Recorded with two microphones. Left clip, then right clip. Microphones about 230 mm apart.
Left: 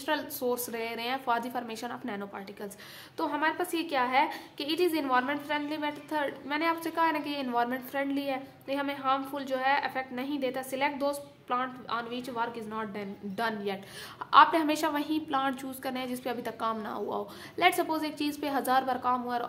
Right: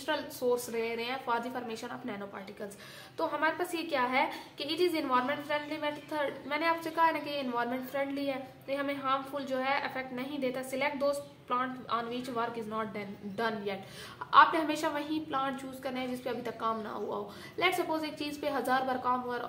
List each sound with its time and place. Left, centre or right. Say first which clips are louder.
0.0 s a woman's voice: left 1 dB; left